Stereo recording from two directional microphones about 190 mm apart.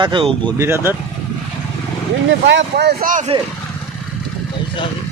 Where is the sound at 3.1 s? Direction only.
40° right (ahead or behind).